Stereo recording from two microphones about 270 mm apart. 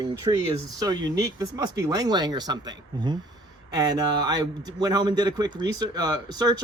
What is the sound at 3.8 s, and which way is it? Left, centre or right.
Speech, centre.